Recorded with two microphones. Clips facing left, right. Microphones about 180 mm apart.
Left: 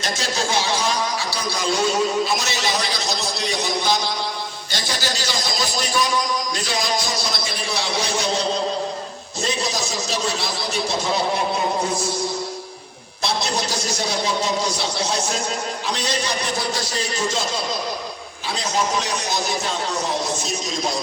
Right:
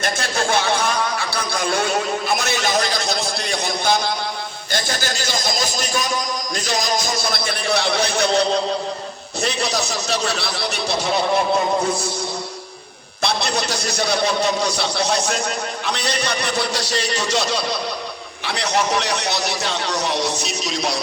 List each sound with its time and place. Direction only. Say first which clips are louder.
0.0 s a man's voice: right 2 dB; 55° right (ahead or behind)
13.2 s speech: right 2 dB; 65° right (ahead or behind)